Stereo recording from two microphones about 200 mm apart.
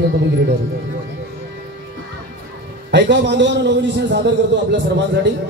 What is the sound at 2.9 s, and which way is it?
A man's voice, 60° right (ahead or behind).